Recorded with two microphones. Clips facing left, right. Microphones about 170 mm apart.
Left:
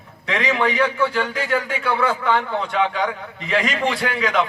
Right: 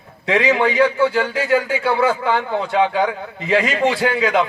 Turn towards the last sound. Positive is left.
turn(degrees=-30)  # may be behind; listen again after turning